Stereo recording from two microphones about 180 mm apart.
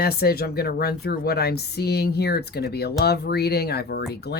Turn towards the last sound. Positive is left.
turn(degrees=65)  # may be behind; listen again after turning